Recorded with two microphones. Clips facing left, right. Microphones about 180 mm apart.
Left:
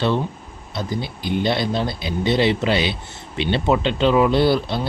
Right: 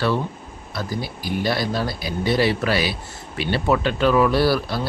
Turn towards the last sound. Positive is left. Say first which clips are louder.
# left 2 dB
turn(degrees=20)  # may be behind; listen again after turning